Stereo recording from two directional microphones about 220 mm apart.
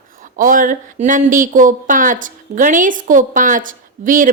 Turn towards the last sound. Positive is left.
turn(degrees=-35)  # may be behind; listen again after turning